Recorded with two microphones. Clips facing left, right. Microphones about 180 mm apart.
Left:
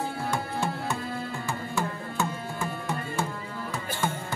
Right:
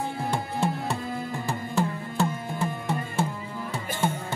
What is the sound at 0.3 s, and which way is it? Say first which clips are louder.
Tabla: right 4 dB; 30° right (ahead or behind).